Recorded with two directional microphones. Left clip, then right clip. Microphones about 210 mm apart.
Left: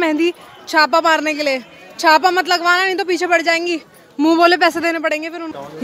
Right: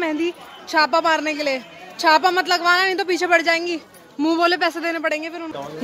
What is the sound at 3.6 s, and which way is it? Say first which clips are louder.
A woman's voice: left 5 dB; 35° left (ahead or behind).